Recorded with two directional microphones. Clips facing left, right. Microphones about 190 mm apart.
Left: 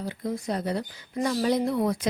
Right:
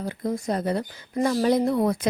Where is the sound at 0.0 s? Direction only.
50° right (ahead or behind).